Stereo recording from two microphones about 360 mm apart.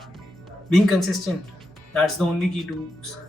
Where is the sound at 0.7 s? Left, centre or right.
Centre.